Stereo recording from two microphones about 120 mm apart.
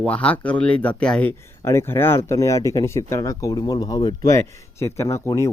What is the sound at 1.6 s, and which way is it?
Speech, 20° left (ahead or behind).